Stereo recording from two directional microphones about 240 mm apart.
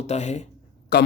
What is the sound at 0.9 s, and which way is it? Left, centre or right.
Speech, left.